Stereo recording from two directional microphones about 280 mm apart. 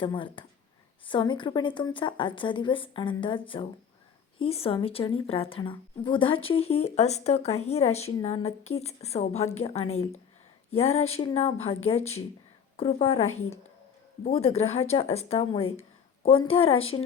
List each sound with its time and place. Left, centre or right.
0.0 s a woman's voice: centre
12.7 s speech: left
13.2 s a woman's voice: left
14.3 s a woman's voice: left